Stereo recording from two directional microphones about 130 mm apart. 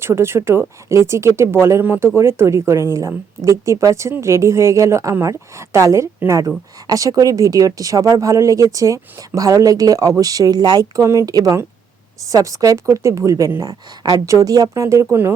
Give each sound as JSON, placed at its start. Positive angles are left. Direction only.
{"t": 0.0, "sound": "speech", "side_deg": -20}